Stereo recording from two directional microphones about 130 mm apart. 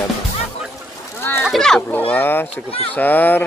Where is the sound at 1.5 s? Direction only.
5° left (ahead or behind).